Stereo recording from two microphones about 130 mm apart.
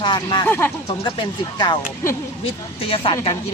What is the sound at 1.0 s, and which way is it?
Speech, 35° left (ahead or behind).